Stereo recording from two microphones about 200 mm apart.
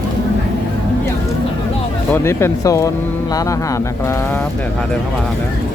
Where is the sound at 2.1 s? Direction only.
10° left (ahead or behind).